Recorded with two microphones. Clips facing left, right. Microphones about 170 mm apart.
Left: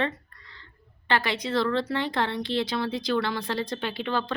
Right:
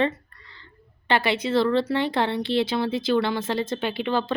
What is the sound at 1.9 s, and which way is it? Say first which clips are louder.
Speech: right 4 dB; 25° right (ahead or behind).